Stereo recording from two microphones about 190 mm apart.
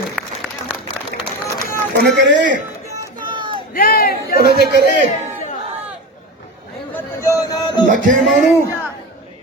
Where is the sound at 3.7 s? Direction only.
50° left (ahead or behind).